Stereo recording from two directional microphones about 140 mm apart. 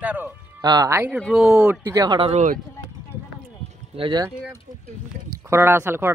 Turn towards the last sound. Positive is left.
turn(degrees=-15)  # may be behind; listen again after turning